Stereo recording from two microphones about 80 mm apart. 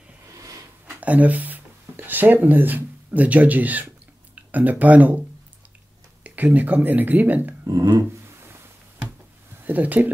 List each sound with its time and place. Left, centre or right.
1.0 s speech: centre
6.2 s speech: right
7.6 s a sound: right
9.7 s speech: right